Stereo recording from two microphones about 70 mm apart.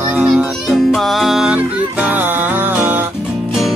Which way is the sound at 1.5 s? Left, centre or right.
Right.